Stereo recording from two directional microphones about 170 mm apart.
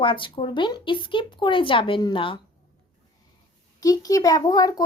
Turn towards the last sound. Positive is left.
turn(degrees=20)  # may be behind; listen again after turning